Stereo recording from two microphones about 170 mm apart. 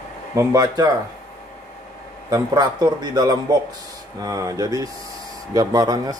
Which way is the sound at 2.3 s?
25° right (ahead or behind).